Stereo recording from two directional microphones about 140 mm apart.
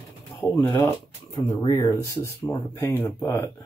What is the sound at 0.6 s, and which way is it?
Speech, 25° left (ahead or behind).